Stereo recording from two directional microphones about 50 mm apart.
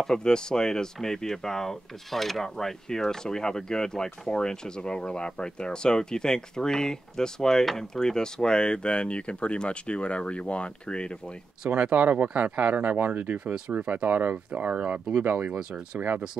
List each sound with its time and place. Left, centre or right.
0.0 s speech: centre
11.7 s speech: right
15.2 s speech: right
15.5 s speech: right